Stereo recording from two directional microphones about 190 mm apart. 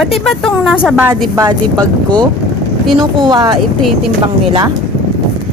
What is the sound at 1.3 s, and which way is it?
Speech, 20° right (ahead or behind).